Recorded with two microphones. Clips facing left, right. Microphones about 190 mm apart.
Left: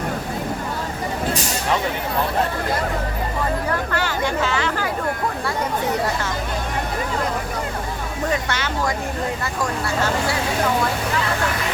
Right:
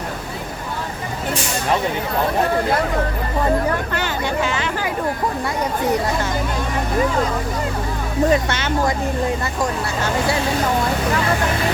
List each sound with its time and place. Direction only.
3.9 s speech: 15° right (ahead or behind)
8.3 s speech: 25° right (ahead or behind)